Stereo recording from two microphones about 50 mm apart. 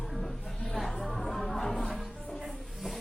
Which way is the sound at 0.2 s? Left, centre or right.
Centre.